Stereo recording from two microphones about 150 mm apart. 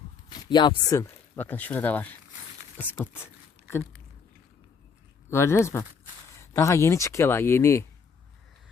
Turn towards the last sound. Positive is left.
turn(degrees=20)  # may be behind; listen again after turning